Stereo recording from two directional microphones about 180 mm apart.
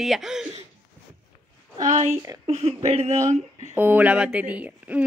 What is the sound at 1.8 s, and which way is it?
Speech, 45° right (ahead or behind).